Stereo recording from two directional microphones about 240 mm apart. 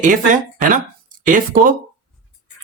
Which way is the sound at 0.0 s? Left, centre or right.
Right.